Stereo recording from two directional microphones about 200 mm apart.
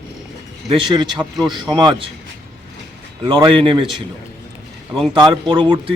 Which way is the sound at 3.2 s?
25° right (ahead or behind).